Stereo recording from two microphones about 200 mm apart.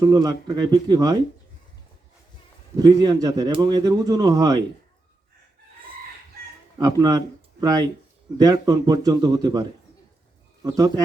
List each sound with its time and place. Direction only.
0.0 s speech: 20° right (ahead or behind)
2.7 s speech: 20° right (ahead or behind)
6.7 s speech: 20° right (ahead or behind)
8.4 s speech: 20° right (ahead or behind)